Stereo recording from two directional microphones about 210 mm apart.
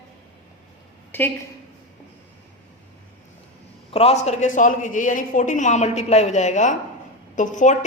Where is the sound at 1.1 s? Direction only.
10° left (ahead or behind).